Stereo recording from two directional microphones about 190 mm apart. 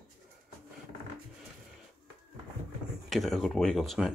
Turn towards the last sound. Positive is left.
turn(degrees=0)  # may be behind; listen again after turning